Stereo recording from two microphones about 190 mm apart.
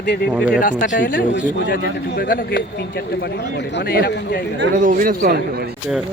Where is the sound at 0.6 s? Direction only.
45° left (ahead or behind).